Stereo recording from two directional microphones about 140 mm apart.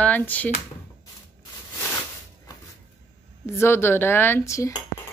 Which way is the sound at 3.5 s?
15° left (ahead or behind).